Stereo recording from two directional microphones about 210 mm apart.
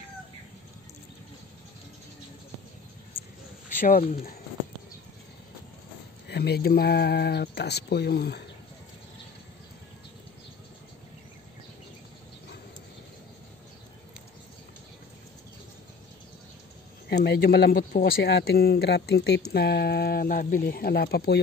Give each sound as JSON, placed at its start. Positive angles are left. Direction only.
{"t": 3.8, "sound": "speech", "side_deg": 40}
{"t": 6.2, "sound": "speech", "side_deg": 50}
{"t": 17.1, "sound": "speech", "side_deg": 50}